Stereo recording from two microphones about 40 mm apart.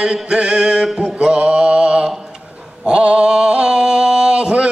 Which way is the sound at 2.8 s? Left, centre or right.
Right.